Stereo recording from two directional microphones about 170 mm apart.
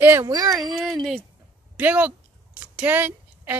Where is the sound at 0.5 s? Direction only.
Centre (ahead or behind).